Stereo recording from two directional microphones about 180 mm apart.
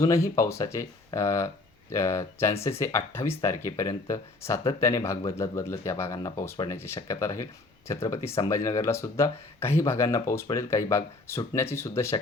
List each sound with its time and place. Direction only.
0.0 s speech: 15° left (ahead or behind)